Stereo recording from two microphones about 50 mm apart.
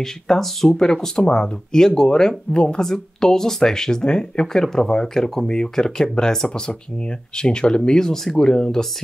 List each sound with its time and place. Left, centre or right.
0.0 s speech: centre